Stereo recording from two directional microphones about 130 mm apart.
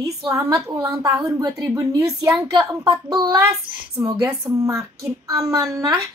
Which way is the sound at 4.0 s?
30° right (ahead or behind).